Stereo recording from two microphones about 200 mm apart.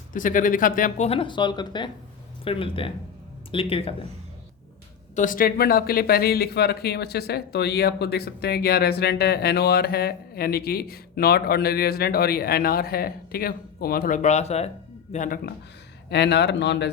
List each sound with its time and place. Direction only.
0.1 s speech: 40° left (ahead or behind)
5.1 s speech: 40° left (ahead or behind)
16.0 s speech: 60° left (ahead or behind)